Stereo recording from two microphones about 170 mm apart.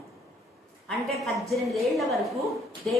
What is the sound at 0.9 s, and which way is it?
A woman's voice, centre (ahead or behind).